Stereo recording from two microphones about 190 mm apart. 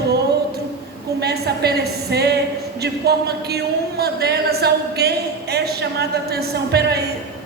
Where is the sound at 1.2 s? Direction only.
60° right (ahead or behind).